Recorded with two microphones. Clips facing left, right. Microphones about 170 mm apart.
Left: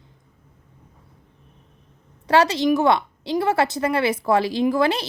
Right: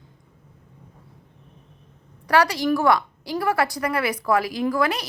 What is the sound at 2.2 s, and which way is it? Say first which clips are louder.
A woman's voice: left 2 dB; 25° left (ahead or behind).